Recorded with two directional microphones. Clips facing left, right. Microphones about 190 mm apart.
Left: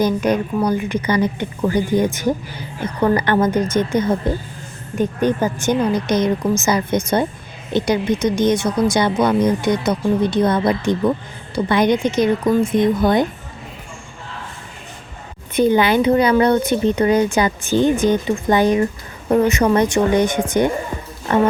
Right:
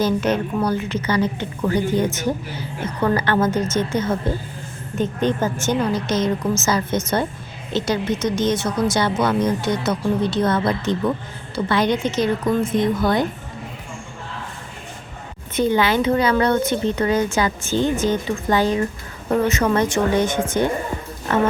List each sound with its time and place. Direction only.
0.0 s a woman's voice: 10° left (ahead or behind)
15.5 s a woman's voice: 15° left (ahead or behind)